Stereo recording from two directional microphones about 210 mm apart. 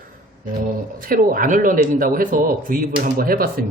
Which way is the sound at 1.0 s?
45° right (ahead or behind).